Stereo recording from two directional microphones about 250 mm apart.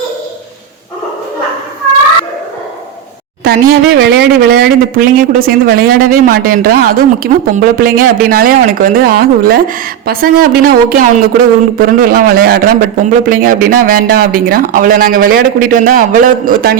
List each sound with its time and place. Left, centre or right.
3.4 s speech: right